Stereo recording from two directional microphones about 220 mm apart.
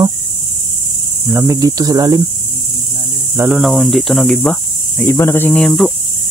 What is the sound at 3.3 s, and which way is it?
Cricket, 5° right (ahead or behind).